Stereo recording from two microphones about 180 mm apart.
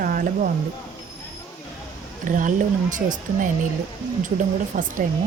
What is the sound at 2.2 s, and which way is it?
Speech, 45° right (ahead or behind).